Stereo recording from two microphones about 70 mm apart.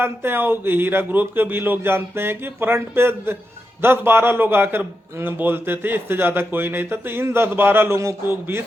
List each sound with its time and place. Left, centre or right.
0.0 s a man's voice: right